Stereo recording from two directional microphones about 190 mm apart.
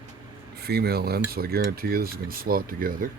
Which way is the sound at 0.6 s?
55° right (ahead or behind).